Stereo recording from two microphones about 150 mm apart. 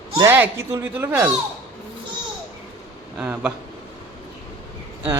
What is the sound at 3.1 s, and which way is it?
Speech, 10° right (ahead or behind).